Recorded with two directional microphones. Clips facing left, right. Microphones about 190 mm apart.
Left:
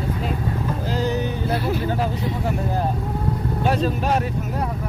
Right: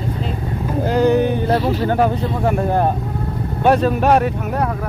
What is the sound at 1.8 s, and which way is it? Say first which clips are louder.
Speech: right 7 dB; 65° right (ahead or behind).